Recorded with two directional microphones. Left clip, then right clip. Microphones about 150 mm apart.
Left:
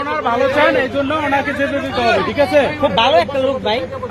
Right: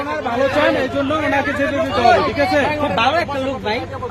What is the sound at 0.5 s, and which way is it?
Speech, 15° right (ahead or behind).